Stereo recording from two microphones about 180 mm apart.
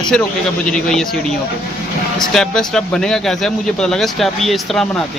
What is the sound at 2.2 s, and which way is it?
Speech, 5° left (ahead or behind).